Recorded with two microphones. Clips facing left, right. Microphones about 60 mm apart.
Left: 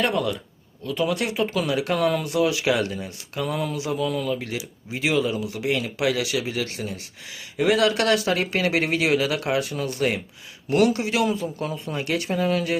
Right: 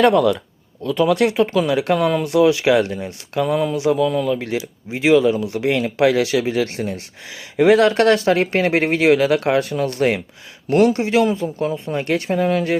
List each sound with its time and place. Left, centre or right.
0.0 s speech: right
0.9 s speech: right
5.5 s speech: right
10.7 s speech: right